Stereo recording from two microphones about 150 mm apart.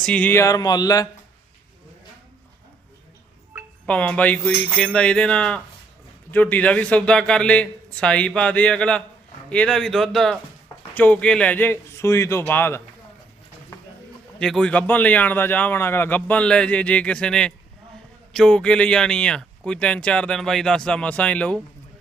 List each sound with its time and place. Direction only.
0.0 s speech: 10° left (ahead or behind); by 1.0 s 25° left (ahead or behind)
3.8 s speech: 10° left (ahead or behind)
14.3 s speech: 5° left (ahead or behind)